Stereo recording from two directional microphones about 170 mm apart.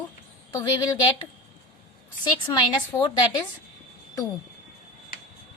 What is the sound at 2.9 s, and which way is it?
Speech, 15° left (ahead or behind).